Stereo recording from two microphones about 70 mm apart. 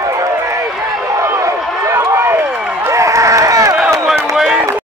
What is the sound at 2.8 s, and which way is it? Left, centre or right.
Run, right.